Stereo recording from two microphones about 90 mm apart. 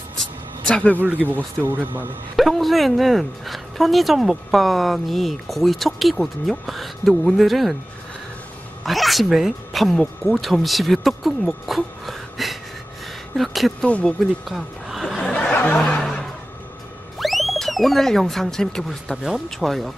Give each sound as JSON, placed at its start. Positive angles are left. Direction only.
{"t": 0.2, "sound": "vehicle", "side_deg": 10}
{"t": 1.3, "sound": "speech", "side_deg": -20}
{"t": 2.3, "sound": "speech", "side_deg": 0}
{"t": 8.8, "sound": "speech", "side_deg": 0}
{"t": 13.8, "sound": "speech", "side_deg": 15}
{"t": 14.5, "sound": "chuckle", "side_deg": 0}
{"t": 15.5, "sound": "snicker", "side_deg": 15}
{"t": 15.8, "sound": "snicker", "side_deg": 5}
{"t": 17.2, "sound": "speech", "side_deg": 0}